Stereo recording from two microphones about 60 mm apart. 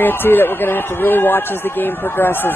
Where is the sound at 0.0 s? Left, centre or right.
Left.